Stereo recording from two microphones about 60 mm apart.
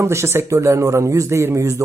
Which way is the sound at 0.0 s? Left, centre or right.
Right.